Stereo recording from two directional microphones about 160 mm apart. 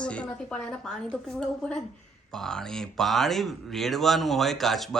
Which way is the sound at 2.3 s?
5° left (ahead or behind).